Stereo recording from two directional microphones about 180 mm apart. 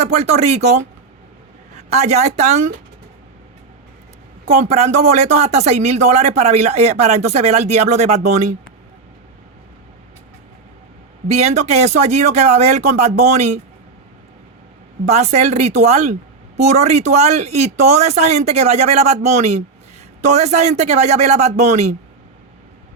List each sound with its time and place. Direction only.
0.0 s a woman's voice: 40° right (ahead or behind)
4.6 s speech: 40° right (ahead or behind)
11.3 s speech: 40° right (ahead or behind)
15.0 s speech: 40° right (ahead or behind)